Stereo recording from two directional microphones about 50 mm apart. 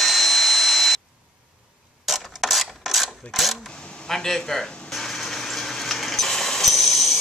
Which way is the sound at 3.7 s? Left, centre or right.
Centre.